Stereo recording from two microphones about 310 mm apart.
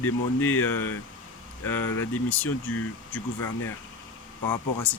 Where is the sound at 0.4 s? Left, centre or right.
Centre.